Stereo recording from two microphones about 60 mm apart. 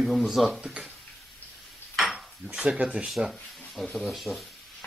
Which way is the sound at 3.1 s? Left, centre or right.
Centre.